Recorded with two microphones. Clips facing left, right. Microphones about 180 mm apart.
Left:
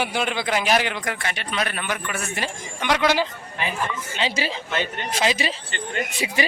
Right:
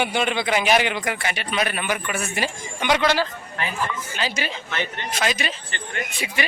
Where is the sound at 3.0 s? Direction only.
15° left (ahead or behind).